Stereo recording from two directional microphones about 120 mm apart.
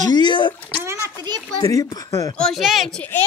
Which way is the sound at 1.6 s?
30° left (ahead or behind).